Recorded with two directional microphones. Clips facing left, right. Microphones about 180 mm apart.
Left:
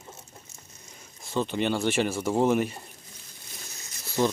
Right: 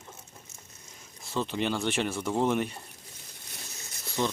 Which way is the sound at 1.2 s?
Centre (ahead or behind).